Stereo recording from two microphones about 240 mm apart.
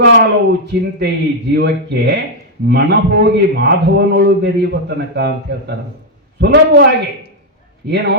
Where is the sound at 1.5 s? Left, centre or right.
Right.